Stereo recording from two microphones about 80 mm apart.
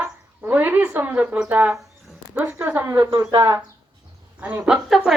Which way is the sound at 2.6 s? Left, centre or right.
Right.